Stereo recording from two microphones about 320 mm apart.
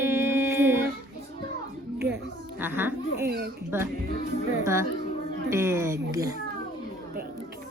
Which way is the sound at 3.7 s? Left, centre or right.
Centre.